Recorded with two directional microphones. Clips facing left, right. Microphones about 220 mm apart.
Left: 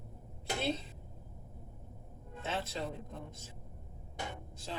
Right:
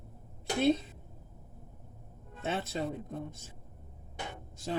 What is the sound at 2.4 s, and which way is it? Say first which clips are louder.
Speech: right 4 dB; 50° right (ahead or behind).